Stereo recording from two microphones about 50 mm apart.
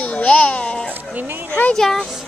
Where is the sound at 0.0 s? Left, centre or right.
Left.